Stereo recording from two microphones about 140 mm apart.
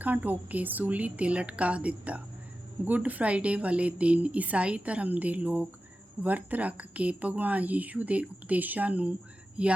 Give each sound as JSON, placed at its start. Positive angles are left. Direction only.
{"t": 0.0, "sound": "a woman's voice", "side_deg": -10}